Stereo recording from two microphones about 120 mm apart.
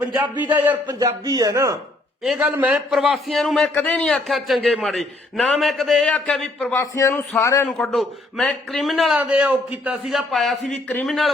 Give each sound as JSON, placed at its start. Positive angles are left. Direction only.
{"t": 0.2, "sound": "a man's voice", "side_deg": -15}
{"t": 0.7, "sound": "speech", "side_deg": -35}
{"t": 2.2, "sound": "a man's voice", "side_deg": -5}
{"t": 2.6, "sound": "a man's voice", "side_deg": -15}
{"t": 3.0, "sound": "a man's voice", "side_deg": 0}
{"t": 6.7, "sound": "a man's voice", "side_deg": 25}
{"t": 7.7, "sound": "a man's voice", "side_deg": 5}
{"t": 9.2, "sound": "a man's voice", "side_deg": -10}
{"t": 10.1, "sound": "a man's voice", "side_deg": 0}